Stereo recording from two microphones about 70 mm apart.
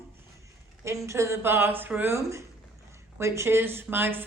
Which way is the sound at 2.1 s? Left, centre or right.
Right.